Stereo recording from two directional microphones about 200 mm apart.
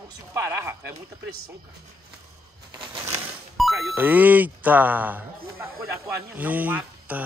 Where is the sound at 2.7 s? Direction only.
25° right (ahead or behind).